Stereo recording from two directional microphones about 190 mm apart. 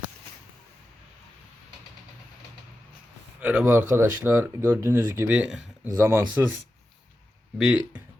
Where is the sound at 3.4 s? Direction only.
5° right (ahead or behind).